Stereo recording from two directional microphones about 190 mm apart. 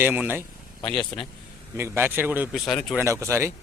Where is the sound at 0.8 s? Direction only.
25° left (ahead or behind).